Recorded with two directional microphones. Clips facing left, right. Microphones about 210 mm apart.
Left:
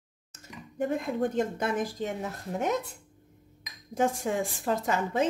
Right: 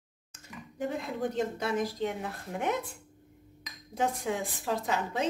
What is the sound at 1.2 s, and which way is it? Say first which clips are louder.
Speech: left 1 dB; 50° left (ahead or behind).